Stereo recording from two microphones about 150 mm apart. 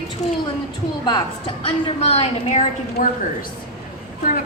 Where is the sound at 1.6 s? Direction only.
40° left (ahead or behind).